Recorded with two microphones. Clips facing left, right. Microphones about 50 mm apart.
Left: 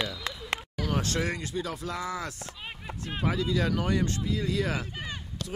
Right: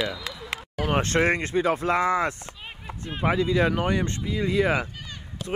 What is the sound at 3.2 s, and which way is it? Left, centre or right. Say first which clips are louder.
Honk: right 6 dB; right.